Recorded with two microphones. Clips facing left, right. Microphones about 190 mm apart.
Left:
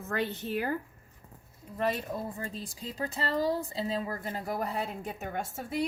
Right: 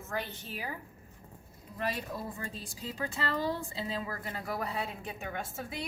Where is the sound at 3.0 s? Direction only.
40° left (ahead or behind).